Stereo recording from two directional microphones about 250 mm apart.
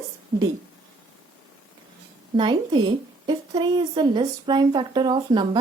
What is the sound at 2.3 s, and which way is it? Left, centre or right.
A woman's voice, centre.